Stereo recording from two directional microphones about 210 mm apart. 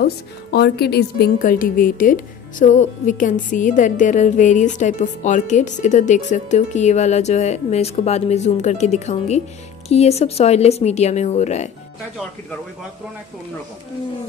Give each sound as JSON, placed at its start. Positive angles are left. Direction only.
{"t": 0.0, "sound": "a woman's voice", "side_deg": 50}